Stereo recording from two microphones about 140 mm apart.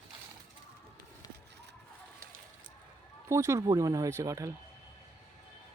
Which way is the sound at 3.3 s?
20° right (ahead or behind).